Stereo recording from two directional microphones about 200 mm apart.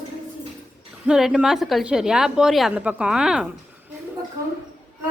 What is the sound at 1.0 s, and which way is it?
A woman's voice, 5° right (ahead or behind).